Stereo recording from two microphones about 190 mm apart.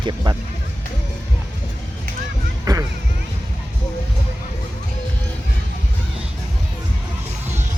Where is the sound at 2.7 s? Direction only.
20° right (ahead or behind).